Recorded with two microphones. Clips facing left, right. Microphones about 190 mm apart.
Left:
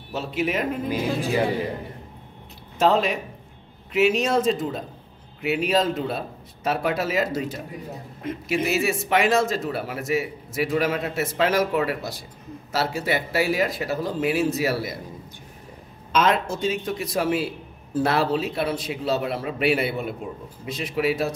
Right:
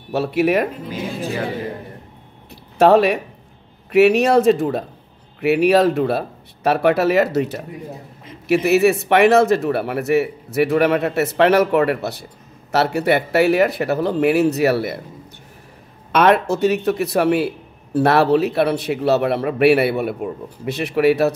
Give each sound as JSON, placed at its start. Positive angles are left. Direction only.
{"t": 0.1, "sound": "a man's voice", "side_deg": -65}
{"t": 2.8, "sound": "a man's voice", "side_deg": -65}
{"t": 16.1, "sound": "a man's voice", "side_deg": -65}